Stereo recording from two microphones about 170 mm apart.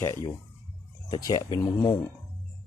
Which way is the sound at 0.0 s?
20° left (ahead or behind).